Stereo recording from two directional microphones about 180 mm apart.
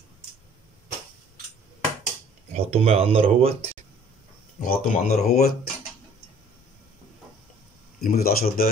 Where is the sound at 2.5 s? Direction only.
35° right (ahead or behind).